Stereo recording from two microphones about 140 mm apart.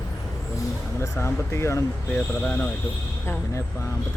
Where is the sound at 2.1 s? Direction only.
10° left (ahead or behind).